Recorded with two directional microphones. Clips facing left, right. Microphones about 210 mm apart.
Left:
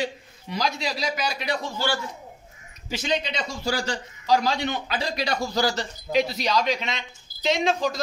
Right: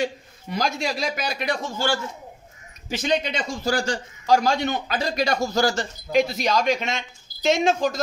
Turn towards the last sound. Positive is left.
turn(degrees=-50)  # may be behind; listen again after turning